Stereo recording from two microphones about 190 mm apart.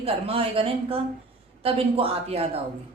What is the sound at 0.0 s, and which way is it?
Speech, 30° right (ahead or behind).